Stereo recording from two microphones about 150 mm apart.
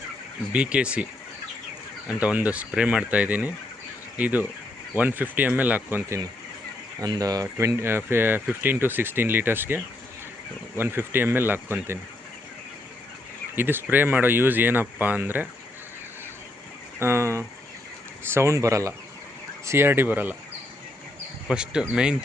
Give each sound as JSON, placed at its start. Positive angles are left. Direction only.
{"t": 0.5, "sound": "speech", "side_deg": -5}
{"t": 2.0, "sound": "speech", "side_deg": -10}
{"t": 13.6, "sound": "speech", "side_deg": -15}
{"t": 17.0, "sound": "speech", "side_deg": -15}
{"t": 21.4, "sound": "speech", "side_deg": -5}